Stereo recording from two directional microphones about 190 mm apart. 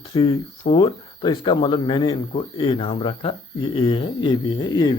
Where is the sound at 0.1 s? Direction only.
25° left (ahead or behind).